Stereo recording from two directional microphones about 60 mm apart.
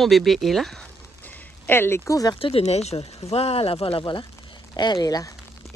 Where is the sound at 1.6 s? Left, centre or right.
Left.